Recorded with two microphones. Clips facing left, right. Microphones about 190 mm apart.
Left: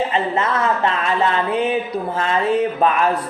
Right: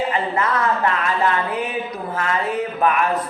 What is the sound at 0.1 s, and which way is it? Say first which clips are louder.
A woman's voice: left 1 dB; 25° left (ahead or behind).